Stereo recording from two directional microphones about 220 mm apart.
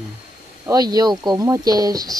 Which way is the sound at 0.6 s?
15° right (ahead or behind).